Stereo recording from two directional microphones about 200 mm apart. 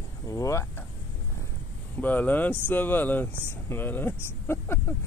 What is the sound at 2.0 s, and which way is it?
Speech, 10° left (ahead or behind).